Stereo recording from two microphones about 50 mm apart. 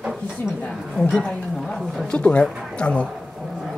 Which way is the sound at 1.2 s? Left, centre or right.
Centre.